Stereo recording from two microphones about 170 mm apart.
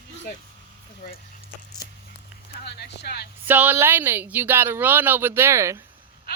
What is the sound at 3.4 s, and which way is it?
Speech, 10° right (ahead or behind).